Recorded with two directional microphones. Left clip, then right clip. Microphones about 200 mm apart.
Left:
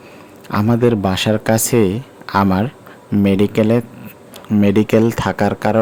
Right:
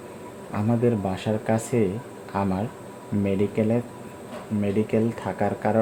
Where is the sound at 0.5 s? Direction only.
40° left (ahead or behind).